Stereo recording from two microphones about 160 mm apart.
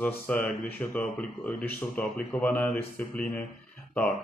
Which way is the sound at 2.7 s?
65° left (ahead or behind).